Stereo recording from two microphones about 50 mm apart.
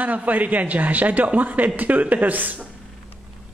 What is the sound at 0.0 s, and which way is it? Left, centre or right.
A man's voice, right.